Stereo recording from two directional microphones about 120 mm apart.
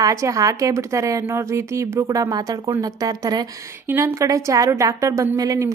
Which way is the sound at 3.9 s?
20° right (ahead or behind).